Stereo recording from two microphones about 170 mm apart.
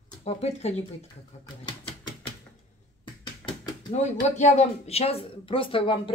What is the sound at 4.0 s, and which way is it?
Speech, 45° left (ahead or behind).